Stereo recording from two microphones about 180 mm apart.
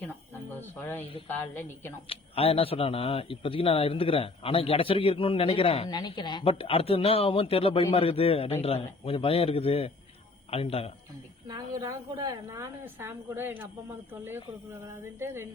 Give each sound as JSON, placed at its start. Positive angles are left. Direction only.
{"t": 0.8, "sound": "a woman's voice", "side_deg": 10}
{"t": 2.0, "sound": "speech", "side_deg": 30}
{"t": 11.4, "sound": "a woman's voice", "side_deg": -20}